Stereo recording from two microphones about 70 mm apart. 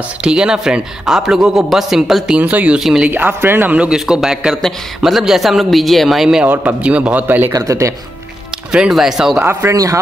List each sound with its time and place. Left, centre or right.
0.2 s a man's voice: centre
2.3 s a man's voice: centre
2.8 s a man's voice: centre
3.1 s a man's voice: right
3.9 s a man's voice: centre
6.4 s a man's voice: right
7.5 s speech: right
8.7 s a man's voice: centre
9.4 s speech: right